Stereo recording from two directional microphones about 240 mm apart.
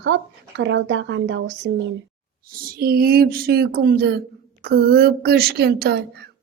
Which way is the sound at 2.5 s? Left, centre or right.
Right.